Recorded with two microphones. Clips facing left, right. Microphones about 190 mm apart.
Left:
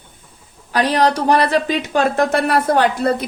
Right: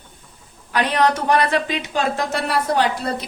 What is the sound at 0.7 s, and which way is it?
Speech, 35° left (ahead or behind).